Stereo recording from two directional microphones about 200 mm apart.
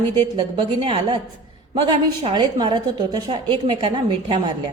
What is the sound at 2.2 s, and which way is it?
A woman's voice, 20° right (ahead or behind).